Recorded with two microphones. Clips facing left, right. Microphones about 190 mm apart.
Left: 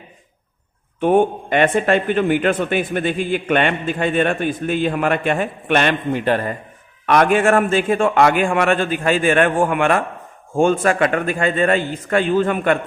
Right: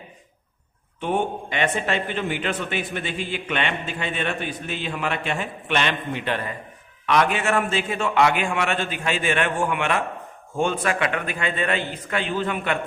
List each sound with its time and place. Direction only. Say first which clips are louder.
0.9 s a man's voice: left 9 dB; 50° left (ahead or behind)